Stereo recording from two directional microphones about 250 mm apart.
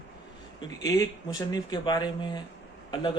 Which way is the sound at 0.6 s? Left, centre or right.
Centre.